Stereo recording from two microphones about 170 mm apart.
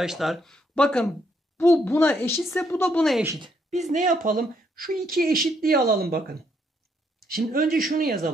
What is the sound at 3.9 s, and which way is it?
Speech, 50° right (ahead or behind).